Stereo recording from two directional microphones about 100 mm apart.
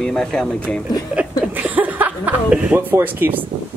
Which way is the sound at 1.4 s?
15° right (ahead or behind).